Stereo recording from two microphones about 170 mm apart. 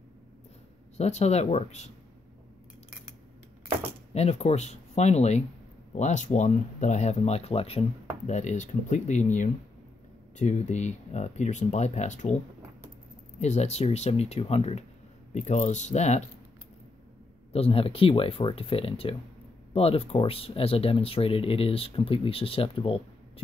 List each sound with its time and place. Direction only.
0.9 s speech: 40° left (ahead or behind)
4.1 s speech: 40° left (ahead or behind)
13.4 s speech: 40° left (ahead or behind)
17.5 s speech: 35° left (ahead or behind)